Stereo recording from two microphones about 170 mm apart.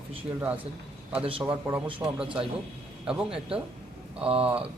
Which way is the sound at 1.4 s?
10° right (ahead or behind).